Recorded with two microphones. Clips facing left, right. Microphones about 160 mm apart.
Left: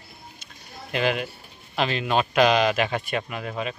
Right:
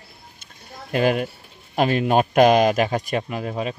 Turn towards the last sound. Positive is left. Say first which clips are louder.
# right 4 dB
turn(degrees=-30)  # may be behind; listen again after turning